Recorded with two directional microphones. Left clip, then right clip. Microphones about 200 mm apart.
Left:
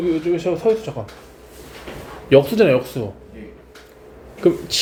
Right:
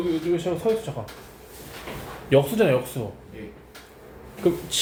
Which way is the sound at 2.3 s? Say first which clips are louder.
Left 6 dB; 30° left (ahead or behind).